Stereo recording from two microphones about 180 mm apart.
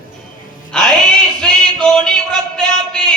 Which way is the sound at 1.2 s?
5° left (ahead or behind).